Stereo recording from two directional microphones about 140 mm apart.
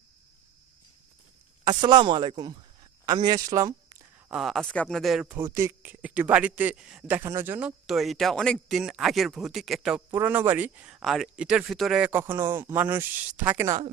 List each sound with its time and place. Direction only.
1.8 s speech: 35° right (ahead or behind)
4.3 s speech: centre (ahead or behind)
5.2 s speech: 15° right (ahead or behind)
7.9 s speech: centre (ahead or behind)
10.1 s speech: 15° right (ahead or behind)
12.2 s speech: 15° right (ahead or behind)